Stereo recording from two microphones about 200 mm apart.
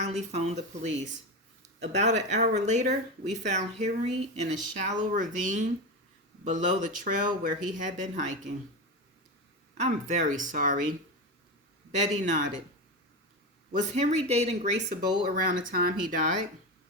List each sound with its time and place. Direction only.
0.0 s speech: 35° right (ahead or behind)
9.7 s speech: 35° right (ahead or behind)
11.9 s speech: 35° right (ahead or behind)
13.9 s speech: 35° right (ahead or behind)